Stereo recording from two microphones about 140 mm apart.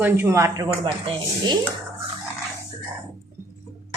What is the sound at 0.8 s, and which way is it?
Speech, 35° right (ahead or behind).